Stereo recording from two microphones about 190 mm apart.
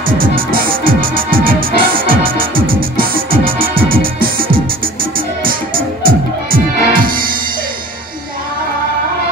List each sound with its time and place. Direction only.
0.2 s music: 50° right (ahead or behind)